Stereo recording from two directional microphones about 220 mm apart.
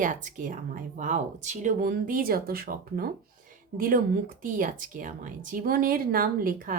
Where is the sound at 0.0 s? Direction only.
35° right (ahead or behind).